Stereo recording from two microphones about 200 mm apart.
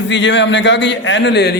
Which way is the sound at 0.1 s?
65° left (ahead or behind).